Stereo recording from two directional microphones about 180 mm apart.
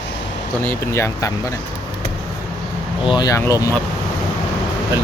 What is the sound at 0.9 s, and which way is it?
Speech, 15° left (ahead or behind).